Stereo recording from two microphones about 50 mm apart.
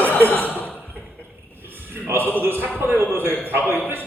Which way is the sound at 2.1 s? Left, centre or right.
Right.